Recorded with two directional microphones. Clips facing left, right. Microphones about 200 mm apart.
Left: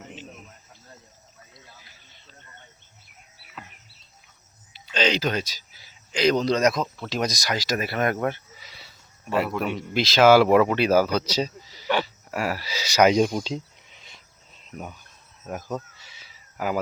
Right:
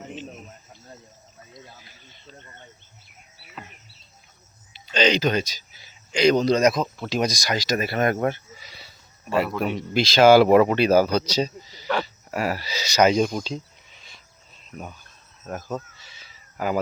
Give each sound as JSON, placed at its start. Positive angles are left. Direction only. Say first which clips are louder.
{"t": 1.5, "sound": "a sound", "louder": "right 8 dB", "side_deg": -20}
{"t": 4.9, "sound": "speech", "louder": "right 3 dB", "side_deg": 5}
{"t": 8.3, "sound": "sheep", "louder": "right 2 dB", "side_deg": 0}
{"t": 9.9, "sound": "speech", "louder": "right 2 dB", "side_deg": 0}
{"t": 14.0, "sound": "cricket", "louder": "even", "side_deg": 20}
{"t": 15.4, "sound": "a sound", "louder": "even", "side_deg": 10}